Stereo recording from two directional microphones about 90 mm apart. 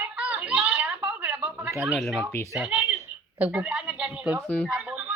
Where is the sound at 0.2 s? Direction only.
15° right (ahead or behind).